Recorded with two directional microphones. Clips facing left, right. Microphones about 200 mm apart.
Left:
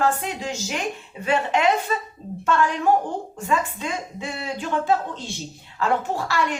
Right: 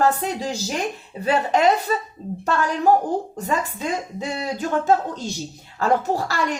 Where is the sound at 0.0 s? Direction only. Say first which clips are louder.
Right 3 dB; 35° right (ahead or behind).